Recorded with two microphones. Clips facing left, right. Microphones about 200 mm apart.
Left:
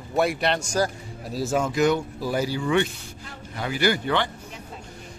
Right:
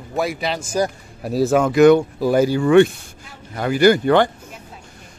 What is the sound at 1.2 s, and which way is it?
Speech, 60° right (ahead or behind).